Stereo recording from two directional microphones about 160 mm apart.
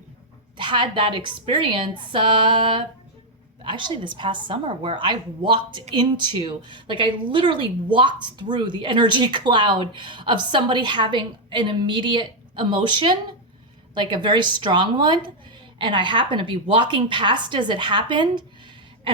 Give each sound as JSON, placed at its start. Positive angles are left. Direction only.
{"t": 0.5, "sound": "a woman's voice", "side_deg": -30}
{"t": 19.1, "sound": "gasp", "side_deg": -35}